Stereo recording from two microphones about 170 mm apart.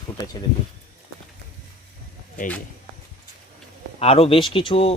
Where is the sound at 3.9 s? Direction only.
35° left (ahead or behind).